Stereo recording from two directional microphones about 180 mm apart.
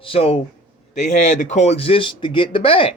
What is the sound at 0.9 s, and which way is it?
Speech, 45° left (ahead or behind).